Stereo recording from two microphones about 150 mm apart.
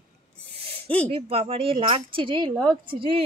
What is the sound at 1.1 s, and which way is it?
Speech, 40° right (ahead or behind).